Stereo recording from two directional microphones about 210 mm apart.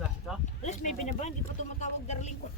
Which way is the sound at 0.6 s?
35° left (ahead or behind).